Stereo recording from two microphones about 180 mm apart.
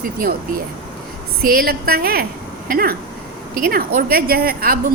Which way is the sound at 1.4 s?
55° right (ahead or behind).